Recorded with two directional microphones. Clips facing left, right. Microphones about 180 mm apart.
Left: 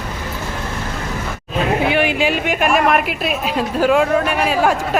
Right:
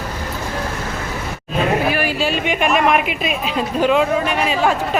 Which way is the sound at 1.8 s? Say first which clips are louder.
Left 2 dB; 25° left (ahead or behind).